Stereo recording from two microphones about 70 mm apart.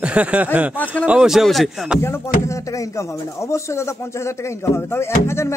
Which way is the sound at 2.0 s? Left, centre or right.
Left.